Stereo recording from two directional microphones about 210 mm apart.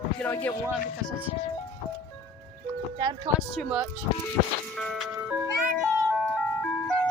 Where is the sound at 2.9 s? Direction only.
20° right (ahead or behind).